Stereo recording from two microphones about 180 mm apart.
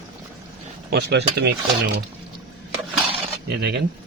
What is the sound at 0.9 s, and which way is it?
Speech, 65° right (ahead or behind).